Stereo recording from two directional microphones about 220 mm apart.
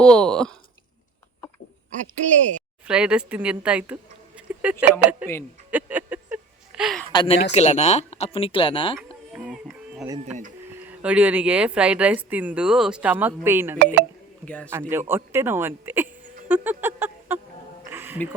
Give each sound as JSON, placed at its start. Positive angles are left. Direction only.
{"t": 0.0, "sound": "speech", "side_deg": 5}
{"t": 2.0, "sound": "speech", "side_deg": -35}
{"t": 2.8, "sound": "speech", "side_deg": -5}
{"t": 4.4, "sound": "a sound", "side_deg": -5}
{"t": 5.2, "sound": "speech", "side_deg": -5}
{"t": 5.7, "sound": "a sound", "side_deg": -5}
{"t": 7.1, "sound": "speech", "side_deg": 25}
{"t": 9.3, "sound": "music", "side_deg": 0}
{"t": 10.8, "sound": "speech", "side_deg": -5}
{"t": 14.4, "sound": "speech", "side_deg": 5}
{"t": 14.7, "sound": "speech", "side_deg": -10}
{"t": 16.5, "sound": "a sound", "side_deg": -10}